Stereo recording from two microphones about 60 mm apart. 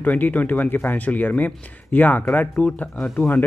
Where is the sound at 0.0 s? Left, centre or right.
Left.